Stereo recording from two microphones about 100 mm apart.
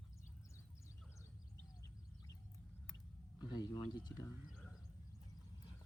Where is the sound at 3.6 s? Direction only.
45° left (ahead or behind).